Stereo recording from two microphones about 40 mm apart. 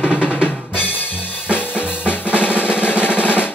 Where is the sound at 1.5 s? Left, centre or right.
Left.